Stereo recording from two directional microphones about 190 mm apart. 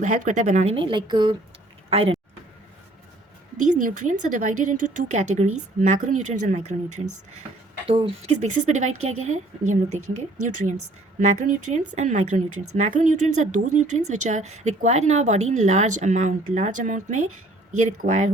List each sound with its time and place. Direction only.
0.0 s a woman's voice: 40° right (ahead or behind)
3.6 s a woman's voice: 45° right (ahead or behind)
7.9 s a woman's voice: 30° right (ahead or behind)
11.2 s a woman's voice: 40° right (ahead or behind)